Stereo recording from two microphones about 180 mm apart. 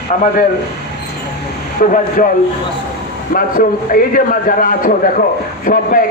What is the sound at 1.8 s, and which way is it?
Speech, 45° left (ahead or behind).